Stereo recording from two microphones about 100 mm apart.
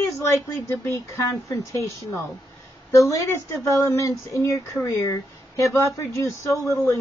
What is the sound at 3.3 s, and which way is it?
Speech, 30° left (ahead or behind).